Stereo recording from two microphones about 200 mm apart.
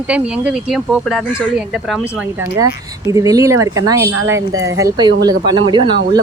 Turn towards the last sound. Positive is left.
turn(degrees=-25)  # may be behind; listen again after turning